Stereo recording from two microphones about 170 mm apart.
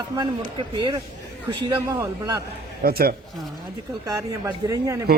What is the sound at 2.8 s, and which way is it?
Speech, 60° right (ahead or behind).